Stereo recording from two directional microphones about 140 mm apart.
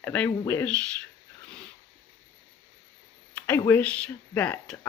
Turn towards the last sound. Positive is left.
turn(degrees=15)  # may be behind; listen again after turning